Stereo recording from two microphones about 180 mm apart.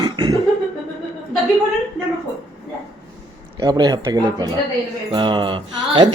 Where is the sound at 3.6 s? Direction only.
20° right (ahead or behind).